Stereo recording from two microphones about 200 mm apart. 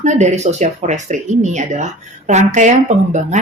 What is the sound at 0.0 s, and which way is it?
Speech, 35° right (ahead or behind).